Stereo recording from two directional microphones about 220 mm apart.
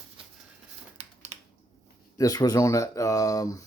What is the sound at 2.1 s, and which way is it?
Speech, 15° left (ahead or behind).